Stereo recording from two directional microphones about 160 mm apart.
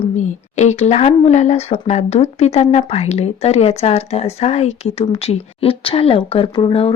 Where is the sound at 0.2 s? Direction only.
45° left (ahead or behind).